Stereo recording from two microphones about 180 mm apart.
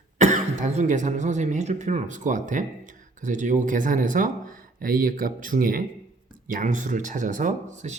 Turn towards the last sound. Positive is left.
turn(degrees=-40)  # may be behind; listen again after turning